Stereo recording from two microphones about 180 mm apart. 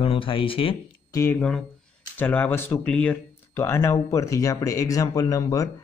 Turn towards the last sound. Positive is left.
turn(degrees=20)  # may be behind; listen again after turning